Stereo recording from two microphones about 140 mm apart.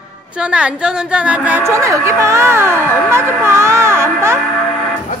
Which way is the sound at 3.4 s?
20° right (ahead or behind).